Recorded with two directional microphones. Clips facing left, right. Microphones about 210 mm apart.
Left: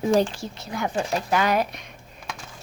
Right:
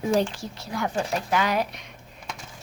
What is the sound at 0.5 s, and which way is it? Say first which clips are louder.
Speech: even; 20° left (ahead or behind).